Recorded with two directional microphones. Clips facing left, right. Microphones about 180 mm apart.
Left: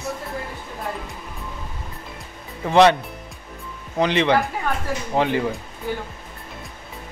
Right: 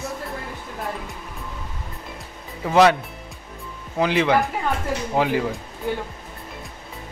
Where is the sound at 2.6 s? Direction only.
5° right (ahead or behind).